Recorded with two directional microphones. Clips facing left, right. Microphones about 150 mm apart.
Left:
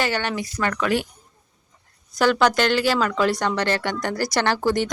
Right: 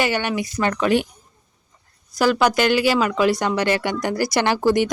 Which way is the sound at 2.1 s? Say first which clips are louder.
Right 1 dB; 5° right (ahead or behind).